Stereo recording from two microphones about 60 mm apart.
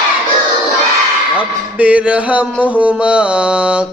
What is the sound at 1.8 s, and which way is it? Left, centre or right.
Mantra, right.